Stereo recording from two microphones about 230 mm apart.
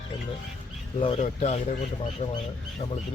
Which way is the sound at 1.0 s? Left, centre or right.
Left.